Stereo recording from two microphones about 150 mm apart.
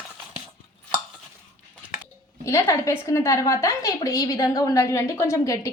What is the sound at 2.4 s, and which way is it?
A woman's voice, 20° left (ahead or behind).